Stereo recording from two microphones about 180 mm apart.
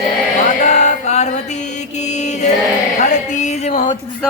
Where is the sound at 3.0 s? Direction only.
40° left (ahead or behind).